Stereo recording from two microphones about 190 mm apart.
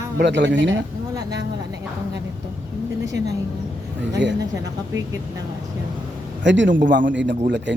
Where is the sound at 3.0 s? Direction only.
70° right (ahead or behind).